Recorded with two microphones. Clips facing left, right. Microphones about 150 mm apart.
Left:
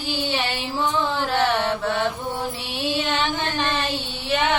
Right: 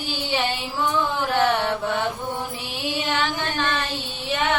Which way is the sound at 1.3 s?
15° left (ahead or behind).